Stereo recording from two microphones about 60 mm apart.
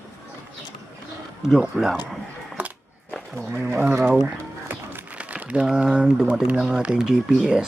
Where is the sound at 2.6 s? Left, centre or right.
Right.